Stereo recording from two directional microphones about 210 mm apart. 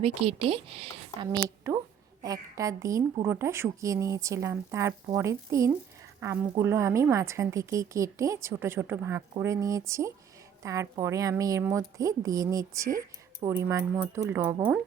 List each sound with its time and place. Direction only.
0.0 s a woman's voice: 25° right (ahead or behind); by 14.8 s 10° right (ahead or behind)